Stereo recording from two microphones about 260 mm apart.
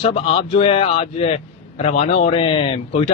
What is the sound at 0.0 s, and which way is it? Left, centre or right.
Speech, left.